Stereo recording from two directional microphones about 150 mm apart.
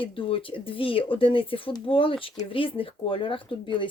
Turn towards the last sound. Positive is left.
turn(degrees=35)  # may be behind; listen again after turning